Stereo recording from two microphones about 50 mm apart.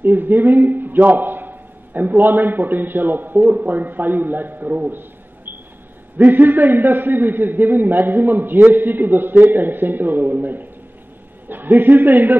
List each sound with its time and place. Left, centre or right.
0.0 s a man's voice: right
4.8 s a sound: right
6.1 s a man's voice: right